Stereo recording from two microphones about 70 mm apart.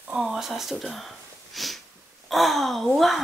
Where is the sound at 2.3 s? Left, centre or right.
Centre.